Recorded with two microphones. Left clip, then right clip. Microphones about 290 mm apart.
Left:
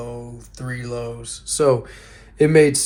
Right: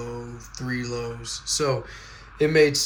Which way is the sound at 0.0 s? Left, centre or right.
Centre.